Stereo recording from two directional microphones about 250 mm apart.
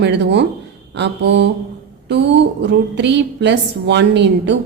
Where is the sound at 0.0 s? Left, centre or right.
Right.